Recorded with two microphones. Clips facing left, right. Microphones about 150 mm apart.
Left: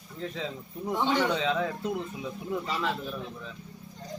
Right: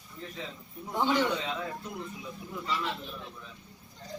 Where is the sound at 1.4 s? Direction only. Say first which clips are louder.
Left 7 dB; 90° left.